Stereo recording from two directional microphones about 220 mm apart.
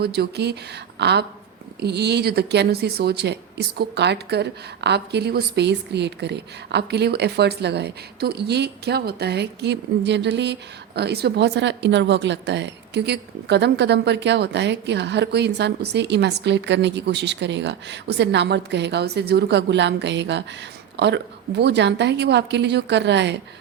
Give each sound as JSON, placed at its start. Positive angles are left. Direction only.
{"t": 0.0, "sound": "a woman's voice", "side_deg": -45}